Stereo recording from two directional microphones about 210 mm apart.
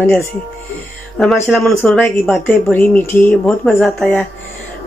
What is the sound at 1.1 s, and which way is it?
Speech, centre (ahead or behind).